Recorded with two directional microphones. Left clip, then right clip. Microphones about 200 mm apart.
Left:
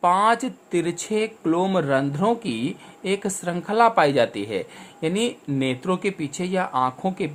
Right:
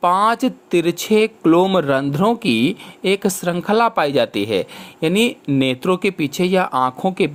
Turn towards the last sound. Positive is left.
turn(degrees=-35)  # may be behind; listen again after turning